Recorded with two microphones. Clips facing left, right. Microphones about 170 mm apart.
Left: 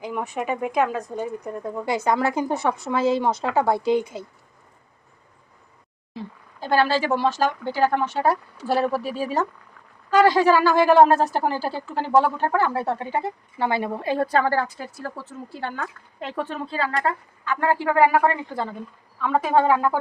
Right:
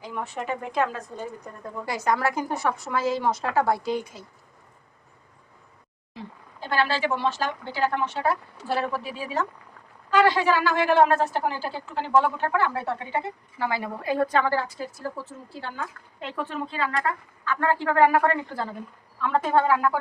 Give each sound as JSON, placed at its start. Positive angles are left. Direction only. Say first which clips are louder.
{"t": 0.0, "sound": "a woman's voice", "louder": "left 4 dB", "side_deg": 15}
{"t": 6.6, "sound": "a woman's voice", "louder": "left 4 dB", "side_deg": 40}
{"t": 13.6, "sound": "a woman's voice", "louder": "left 5 dB", "side_deg": 25}
{"t": 16.2, "sound": "a woman's voice", "louder": "left 2 dB", "side_deg": 35}
{"t": 17.4, "sound": "a woman's voice", "louder": "left 2 dB", "side_deg": 15}
{"t": 19.5, "sound": "a woman's voice", "louder": "left 3 dB", "side_deg": 20}